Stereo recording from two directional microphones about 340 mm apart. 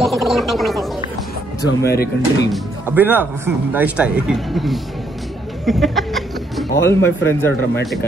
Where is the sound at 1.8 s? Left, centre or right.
Left.